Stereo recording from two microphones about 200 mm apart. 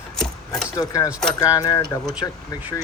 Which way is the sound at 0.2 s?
5° left (ahead or behind).